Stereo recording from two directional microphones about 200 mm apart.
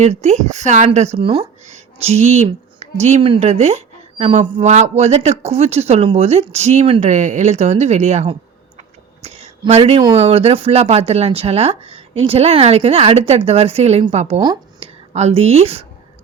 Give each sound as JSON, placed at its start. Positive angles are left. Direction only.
{"t": 0.0, "sound": "speech", "side_deg": -35}
{"t": 14.4, "sound": "a sound", "side_deg": -20}
{"t": 15.1, "sound": "speech", "side_deg": -30}